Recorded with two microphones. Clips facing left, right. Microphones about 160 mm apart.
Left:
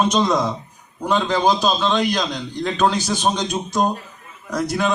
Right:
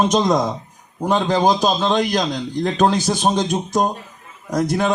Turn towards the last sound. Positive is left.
turn(degrees=-45)  # may be behind; listen again after turning